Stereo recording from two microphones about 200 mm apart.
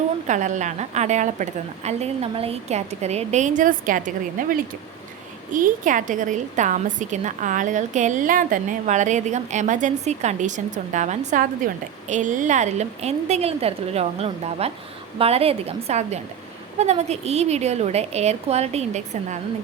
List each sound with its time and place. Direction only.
0.3 s a woman's voice: 35° right (ahead or behind)